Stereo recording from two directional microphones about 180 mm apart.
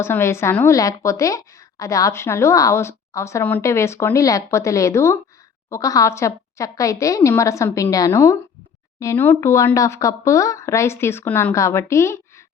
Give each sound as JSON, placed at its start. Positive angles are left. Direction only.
{"t": 0.0, "sound": "a woman's voice", "side_deg": 15}